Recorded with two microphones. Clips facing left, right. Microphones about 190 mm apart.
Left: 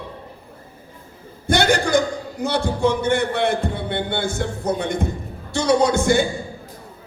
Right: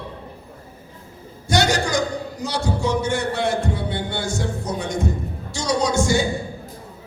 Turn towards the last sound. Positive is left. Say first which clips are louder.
# left 3 dB
turn(degrees=55)  # may be behind; listen again after turning